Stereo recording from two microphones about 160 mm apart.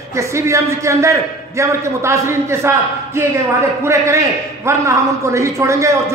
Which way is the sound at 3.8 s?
20° right (ahead or behind).